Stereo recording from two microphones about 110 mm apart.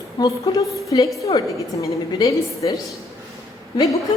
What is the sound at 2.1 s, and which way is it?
Speech, 30° left (ahead or behind).